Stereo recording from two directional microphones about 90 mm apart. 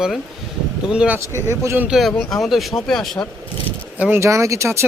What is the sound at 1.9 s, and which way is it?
Speech, centre (ahead or behind).